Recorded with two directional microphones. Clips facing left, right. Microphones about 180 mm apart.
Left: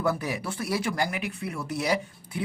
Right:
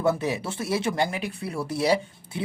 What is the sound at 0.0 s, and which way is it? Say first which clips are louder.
Speech: right 3 dB; 25° right (ahead or behind).